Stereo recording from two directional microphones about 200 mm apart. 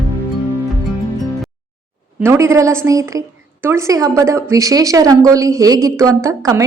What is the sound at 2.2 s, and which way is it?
A woman's voice, 15° right (ahead or behind).